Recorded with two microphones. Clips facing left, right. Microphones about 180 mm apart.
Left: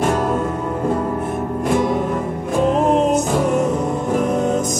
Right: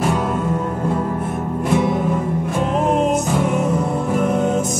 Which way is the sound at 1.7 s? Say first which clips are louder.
Even; centre (ahead or behind).